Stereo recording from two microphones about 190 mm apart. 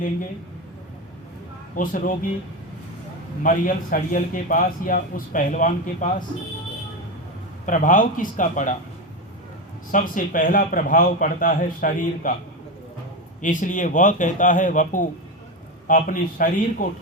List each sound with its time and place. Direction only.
1.7 s a man's voice: 45° left (ahead or behind)
3.4 s a man's voice: 45° left (ahead or behind)
7.6 s a man's voice: 45° left (ahead or behind)
9.9 s a man's voice: 45° left (ahead or behind)
13.4 s a man's voice: 45° left (ahead or behind)